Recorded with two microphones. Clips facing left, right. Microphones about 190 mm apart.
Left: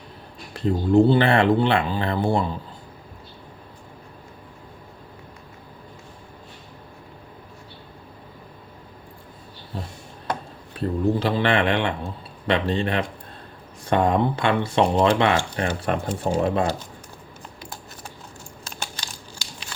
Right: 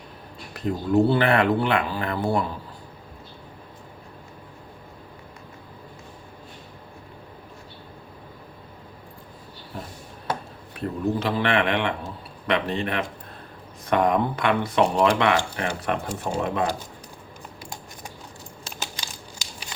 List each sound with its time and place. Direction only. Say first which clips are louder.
0.5 s speech: left 4 dB; 30° left (ahead or behind)
10.8 s speech: left 3 dB; 30° left (ahead or behind)